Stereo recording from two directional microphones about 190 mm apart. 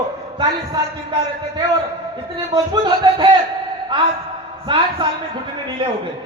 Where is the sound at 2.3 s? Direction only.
25° right (ahead or behind).